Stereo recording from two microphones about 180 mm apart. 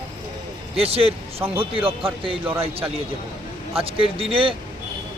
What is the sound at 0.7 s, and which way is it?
A man's voice, 35° right (ahead or behind).